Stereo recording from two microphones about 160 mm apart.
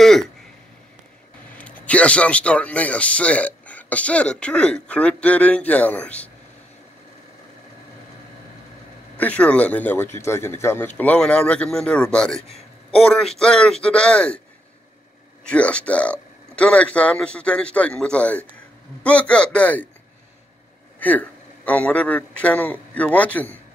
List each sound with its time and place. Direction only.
0.0 s a sound: centre (ahead or behind)
1.6 s a man's voice: 10° left (ahead or behind)
9.2 s a man's voice: 5° left (ahead or behind)
15.4 s a man's voice: 5° left (ahead or behind)
21.0 s a man's voice: 10° left (ahead or behind)